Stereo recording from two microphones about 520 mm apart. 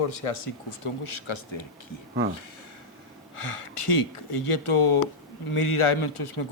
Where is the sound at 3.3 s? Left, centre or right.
Left.